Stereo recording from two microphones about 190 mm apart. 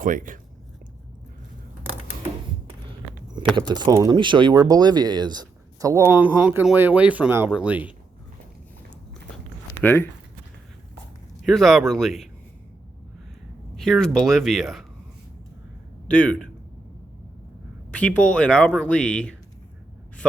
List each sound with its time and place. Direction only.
0.0 s speech: 45° right (ahead or behind)
3.5 s speech: 20° right (ahead or behind)
9.7 s speech: 10° left (ahead or behind)
11.4 s speech: centre (ahead or behind)
13.7 s speech: centre (ahead or behind)
16.0 s speech: 5° left (ahead or behind)
17.9 s speech: 5° left (ahead or behind)